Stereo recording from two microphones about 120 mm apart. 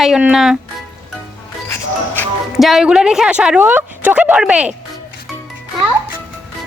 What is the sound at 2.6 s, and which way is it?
Speech, centre (ahead or behind).